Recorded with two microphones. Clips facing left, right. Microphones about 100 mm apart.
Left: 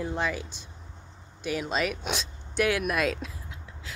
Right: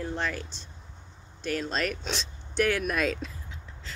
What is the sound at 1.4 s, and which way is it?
Speech, 10° left (ahead or behind).